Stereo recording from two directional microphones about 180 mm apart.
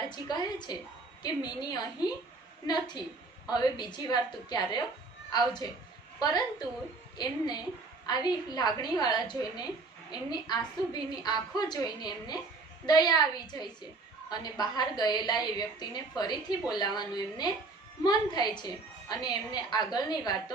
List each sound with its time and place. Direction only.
0.1 s a woman's voice: 25° left (ahead or behind)
6.1 s a woman's voice: 20° left (ahead or behind)